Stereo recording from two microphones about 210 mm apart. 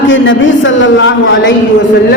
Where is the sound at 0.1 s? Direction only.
65° left (ahead or behind).